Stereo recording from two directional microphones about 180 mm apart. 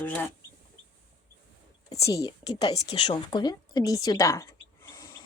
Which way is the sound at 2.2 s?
25° left (ahead or behind).